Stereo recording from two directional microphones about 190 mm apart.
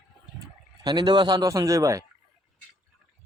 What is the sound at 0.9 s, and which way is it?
Speech, 25° right (ahead or behind).